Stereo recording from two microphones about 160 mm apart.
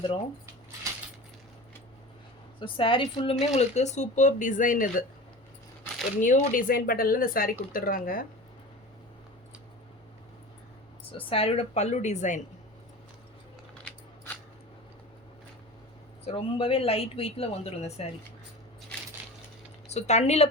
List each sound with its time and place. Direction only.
2.6 s speech: 30° left (ahead or behind)
3.4 s speech: 40° left (ahead or behind); by 5.0 s 55° left (ahead or behind)
6.1 s speech: 50° left (ahead or behind)
11.3 s speech: 40° left (ahead or behind)
16.2 s speech: 35° left (ahead or behind)
19.9 s speech: 45° left (ahead or behind)